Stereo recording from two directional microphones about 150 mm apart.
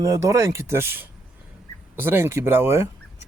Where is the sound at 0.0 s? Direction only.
20° right (ahead or behind).